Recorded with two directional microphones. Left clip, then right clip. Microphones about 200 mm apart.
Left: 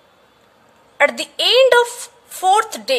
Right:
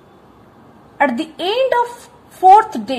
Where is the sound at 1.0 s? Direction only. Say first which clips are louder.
Left 1 dB; 40° left (ahead or behind).